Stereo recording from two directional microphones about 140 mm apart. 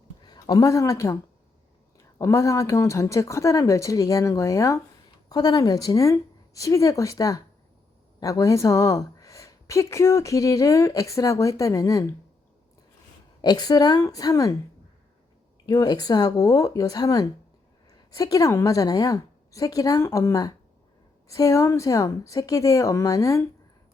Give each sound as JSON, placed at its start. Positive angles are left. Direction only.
{"t": 0.3, "sound": "a woman's voice", "side_deg": 25}
{"t": 13.4, "sound": "speech", "side_deg": 30}
{"t": 15.6, "sound": "speech", "side_deg": 25}